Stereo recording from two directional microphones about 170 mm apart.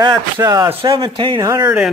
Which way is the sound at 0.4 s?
20° right (ahead or behind).